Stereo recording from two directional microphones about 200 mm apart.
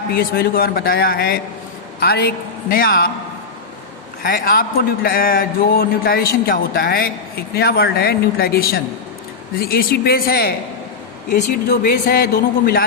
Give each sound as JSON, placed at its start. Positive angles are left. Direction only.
{"t": 0.1, "sound": "a man's voice", "side_deg": 50}
{"t": 4.2, "sound": "a man's voice", "side_deg": 50}
{"t": 11.7, "sound": "a man's voice", "side_deg": 45}